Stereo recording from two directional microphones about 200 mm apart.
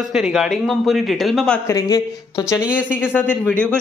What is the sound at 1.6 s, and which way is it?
Speech, 20° left (ahead or behind).